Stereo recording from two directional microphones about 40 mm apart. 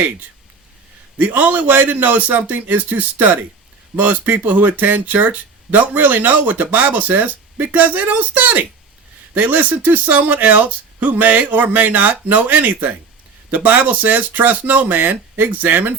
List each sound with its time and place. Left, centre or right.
1.2 s speech: right